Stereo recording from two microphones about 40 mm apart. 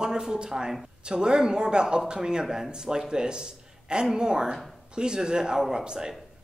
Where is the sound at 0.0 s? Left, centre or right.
Centre.